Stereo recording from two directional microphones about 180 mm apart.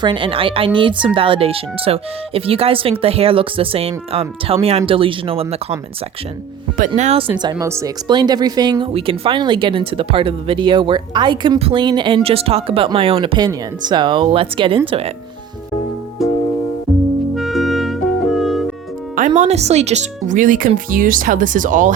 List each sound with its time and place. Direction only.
0.0 s speech: 30° right (ahead or behind)
6.7 s speech: 45° right (ahead or behind)
17.3 s clarinet: centre (ahead or behind)
19.4 s speech: 40° right (ahead or behind)